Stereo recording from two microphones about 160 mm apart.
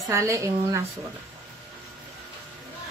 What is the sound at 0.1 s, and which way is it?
Speech, 20° right (ahead or behind).